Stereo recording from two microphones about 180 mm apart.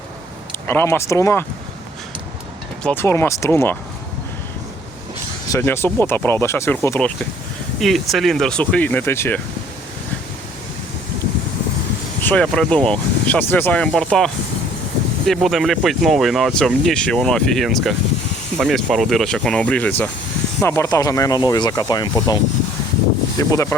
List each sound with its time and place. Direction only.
0.7 s speech: 15° left (ahead or behind)
2.8 s speech: 10° left (ahead or behind)
5.5 s speech: 15° left (ahead or behind)
7.8 s speech: centre (ahead or behind)
12.2 s speech: 5° left (ahead or behind)
15.3 s speech: centre (ahead or behind); by 22.4 s 20° left (ahead or behind)
23.4 s speech: 20° left (ahead or behind)